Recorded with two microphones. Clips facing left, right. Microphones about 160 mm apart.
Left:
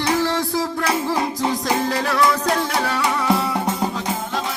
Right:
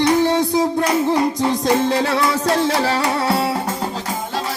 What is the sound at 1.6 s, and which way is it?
Music, 25° right (ahead or behind).